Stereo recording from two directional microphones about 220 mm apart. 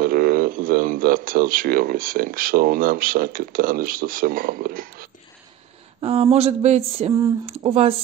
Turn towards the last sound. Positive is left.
turn(degrees=-25)  # may be behind; listen again after turning